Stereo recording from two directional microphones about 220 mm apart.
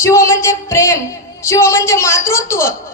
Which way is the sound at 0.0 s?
15° left (ahead or behind).